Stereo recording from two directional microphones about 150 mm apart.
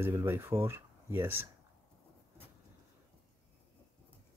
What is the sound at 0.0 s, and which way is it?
Speech, 15° right (ahead or behind).